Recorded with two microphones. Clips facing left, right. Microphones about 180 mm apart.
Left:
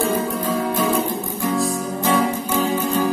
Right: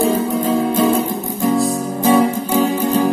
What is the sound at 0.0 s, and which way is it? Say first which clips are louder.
Music: right 5 dB; 25° right (ahead or behind).